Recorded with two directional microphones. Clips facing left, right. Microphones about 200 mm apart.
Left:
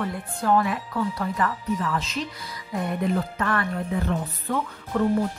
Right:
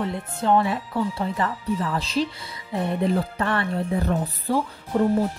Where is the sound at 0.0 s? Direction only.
25° right (ahead or behind).